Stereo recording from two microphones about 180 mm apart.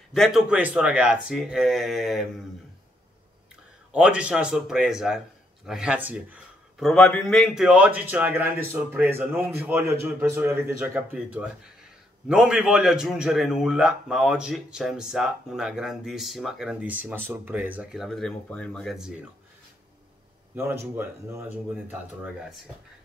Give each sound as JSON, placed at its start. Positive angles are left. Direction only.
{"t": 0.1, "sound": "a man's voice", "side_deg": 0}
{"t": 3.9, "sound": "a man's voice", "side_deg": -5}
{"t": 18.0, "sound": "a man's voice", "side_deg": 0}
{"t": 20.5, "sound": "a man's voice", "side_deg": -10}